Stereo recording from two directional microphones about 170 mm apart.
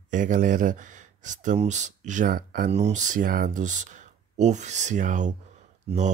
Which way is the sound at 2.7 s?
40° right (ahead or behind).